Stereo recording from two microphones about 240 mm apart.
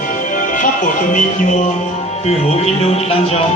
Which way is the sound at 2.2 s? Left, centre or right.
Left.